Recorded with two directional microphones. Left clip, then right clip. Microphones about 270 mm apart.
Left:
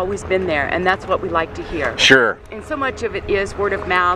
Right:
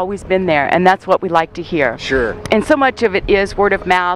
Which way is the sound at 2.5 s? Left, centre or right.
Right.